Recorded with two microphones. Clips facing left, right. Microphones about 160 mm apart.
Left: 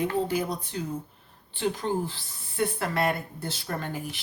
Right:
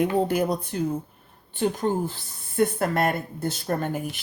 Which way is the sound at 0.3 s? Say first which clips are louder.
Right 5 dB; 55° right (ahead or behind).